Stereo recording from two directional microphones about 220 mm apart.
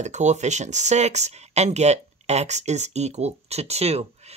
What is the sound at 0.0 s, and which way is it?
Speech, 30° right (ahead or behind).